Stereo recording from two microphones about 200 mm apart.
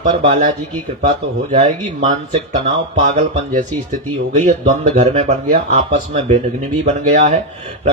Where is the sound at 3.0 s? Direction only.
40° right (ahead or behind).